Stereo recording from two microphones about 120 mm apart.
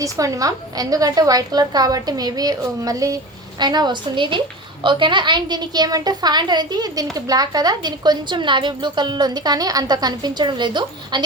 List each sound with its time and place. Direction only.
0.0 s a woman's voice: 30° right (ahead or behind)